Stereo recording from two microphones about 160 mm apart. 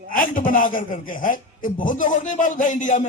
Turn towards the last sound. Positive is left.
turn(degrees=50)  # may be behind; listen again after turning